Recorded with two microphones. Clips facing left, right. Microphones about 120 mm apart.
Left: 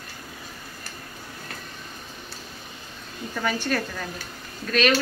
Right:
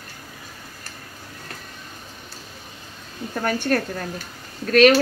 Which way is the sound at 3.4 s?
55° right (ahead or behind).